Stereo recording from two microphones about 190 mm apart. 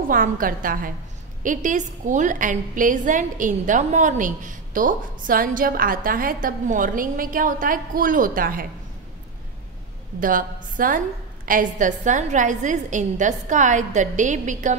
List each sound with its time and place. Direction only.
0.1 s a woman's voice: 45° right (ahead or behind)
10.2 s a woman's voice: 45° right (ahead or behind)